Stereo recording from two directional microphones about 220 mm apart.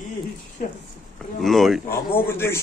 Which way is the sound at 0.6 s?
40° left (ahead or behind).